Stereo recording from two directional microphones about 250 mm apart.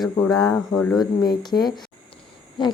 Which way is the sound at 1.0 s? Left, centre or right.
Centre.